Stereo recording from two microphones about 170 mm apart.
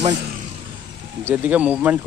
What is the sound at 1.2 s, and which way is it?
Speech, 10° right (ahead or behind).